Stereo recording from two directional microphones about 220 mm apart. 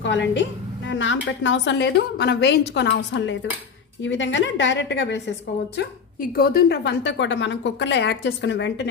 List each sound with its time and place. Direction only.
0.0 s a woman's voice: 55° left (ahead or behind)
6.3 s a woman's voice: 45° left (ahead or behind)